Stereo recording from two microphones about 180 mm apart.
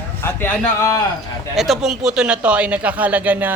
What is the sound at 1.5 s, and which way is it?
Speech, centre (ahead or behind).